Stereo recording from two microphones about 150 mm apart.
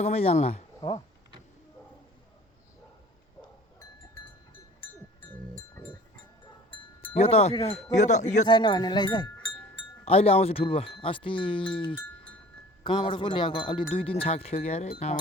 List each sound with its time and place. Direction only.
0.0 s speech: 40° left (ahead or behind)
0.8 s speech: 30° left (ahead or behind)
7.0 s speech: 40° left (ahead or behind)
8.4 s speech: 30° left (ahead or behind)
9.7 s speech: 40° left (ahead or behind)